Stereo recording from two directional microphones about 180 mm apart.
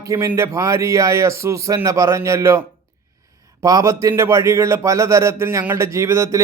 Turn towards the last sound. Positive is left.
turn(degrees=-15)  # may be behind; listen again after turning